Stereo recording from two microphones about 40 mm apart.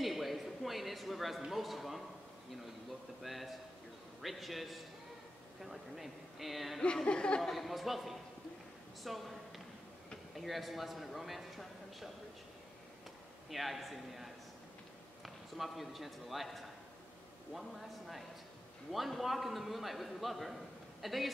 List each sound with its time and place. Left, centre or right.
0.0 s a sound: centre
1.5 s a man's voice: centre
3.2 s a man's voice: centre
7.1 s speech: left
7.4 s a man's voice: centre
13.5 s a man's voice: centre